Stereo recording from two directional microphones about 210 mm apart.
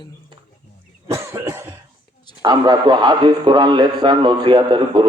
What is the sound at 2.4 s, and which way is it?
A man's voice, 20° right (ahead or behind).